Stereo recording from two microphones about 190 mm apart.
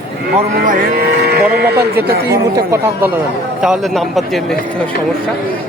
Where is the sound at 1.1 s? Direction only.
60° right (ahead or behind).